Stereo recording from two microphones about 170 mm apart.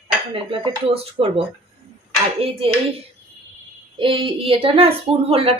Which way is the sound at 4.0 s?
30° right (ahead or behind).